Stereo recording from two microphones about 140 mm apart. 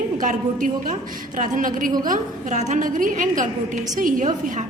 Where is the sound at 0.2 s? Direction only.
65° right (ahead or behind).